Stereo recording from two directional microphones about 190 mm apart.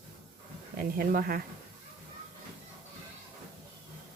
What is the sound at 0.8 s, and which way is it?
Speech, 50° right (ahead or behind).